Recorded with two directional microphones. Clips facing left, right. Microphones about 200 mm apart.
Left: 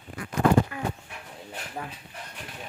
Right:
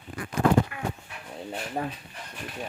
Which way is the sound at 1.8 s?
35° right (ahead or behind).